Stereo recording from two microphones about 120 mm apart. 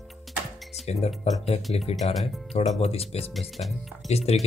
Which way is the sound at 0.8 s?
60° left (ahead or behind).